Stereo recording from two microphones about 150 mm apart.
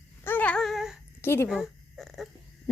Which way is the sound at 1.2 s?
15° left (ahead or behind).